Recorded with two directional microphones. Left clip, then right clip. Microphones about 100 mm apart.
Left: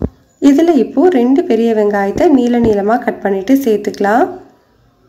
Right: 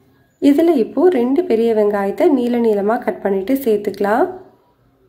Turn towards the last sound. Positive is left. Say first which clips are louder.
# left 4 dB
turn(degrees=10)  # may be behind; listen again after turning